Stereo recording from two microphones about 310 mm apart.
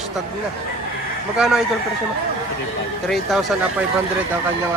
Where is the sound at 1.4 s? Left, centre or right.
Centre.